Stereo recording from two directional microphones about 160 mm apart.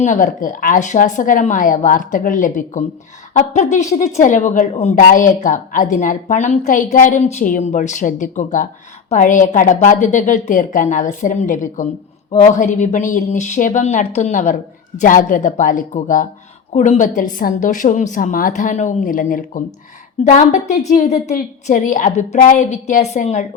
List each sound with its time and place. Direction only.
0.0 s a woman's voice: 55° left (ahead or behind)